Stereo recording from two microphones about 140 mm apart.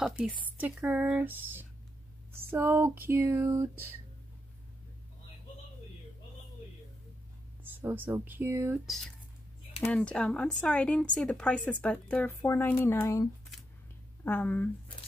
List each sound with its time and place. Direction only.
0.6 s speech: 10° right (ahead or behind)
7.6 s speech: 15° right (ahead or behind)
8.8 s speech: centre (ahead or behind)